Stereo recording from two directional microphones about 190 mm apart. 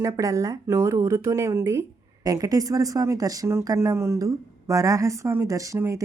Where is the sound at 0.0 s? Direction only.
15° right (ahead or behind).